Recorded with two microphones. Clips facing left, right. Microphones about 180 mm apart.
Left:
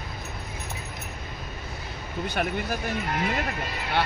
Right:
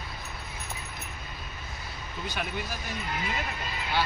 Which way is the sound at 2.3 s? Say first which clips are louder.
Left 6 dB; 55° left (ahead or behind).